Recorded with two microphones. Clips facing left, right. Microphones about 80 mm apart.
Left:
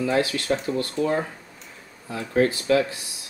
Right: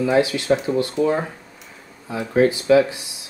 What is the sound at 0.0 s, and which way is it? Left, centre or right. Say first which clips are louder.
Speech: right 5 dB; centre.